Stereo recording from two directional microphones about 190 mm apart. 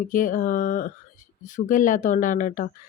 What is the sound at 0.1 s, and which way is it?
Speech, 45° left (ahead or behind).